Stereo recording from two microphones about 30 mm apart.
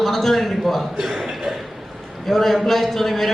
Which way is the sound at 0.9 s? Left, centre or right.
Centre.